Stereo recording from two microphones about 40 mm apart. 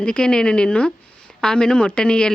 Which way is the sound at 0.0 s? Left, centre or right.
Left.